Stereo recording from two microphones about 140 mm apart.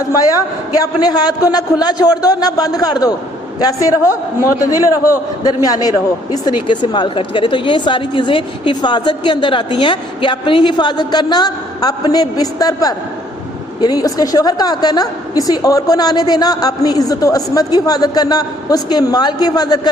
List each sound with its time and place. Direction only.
0.7 s a woman's voice: 25° left (ahead or behind)